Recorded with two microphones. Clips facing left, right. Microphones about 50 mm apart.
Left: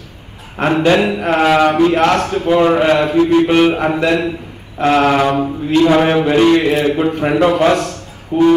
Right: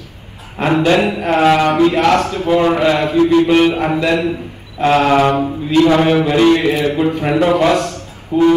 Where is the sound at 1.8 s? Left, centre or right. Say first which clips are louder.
Even; left.